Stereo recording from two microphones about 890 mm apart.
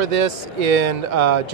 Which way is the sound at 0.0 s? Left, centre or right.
Right.